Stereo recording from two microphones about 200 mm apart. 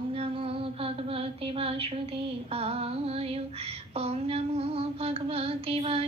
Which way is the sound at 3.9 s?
30° right (ahead or behind).